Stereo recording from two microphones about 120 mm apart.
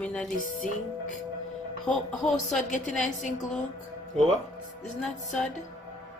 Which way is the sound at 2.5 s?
90° left.